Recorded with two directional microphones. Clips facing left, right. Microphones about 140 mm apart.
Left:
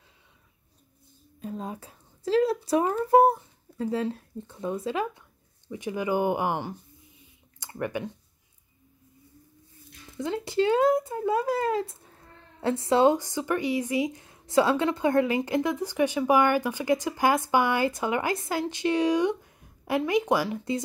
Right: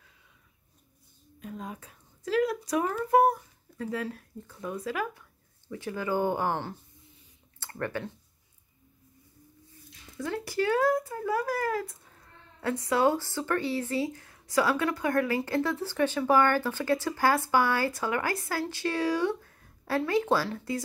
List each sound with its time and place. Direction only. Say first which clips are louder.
1.4 s speech: left 4 dB; 30° left (ahead or behind); by 8.1 s 15° left (ahead or behind)
10.1 s speech: left 4 dB; 20° left (ahead or behind)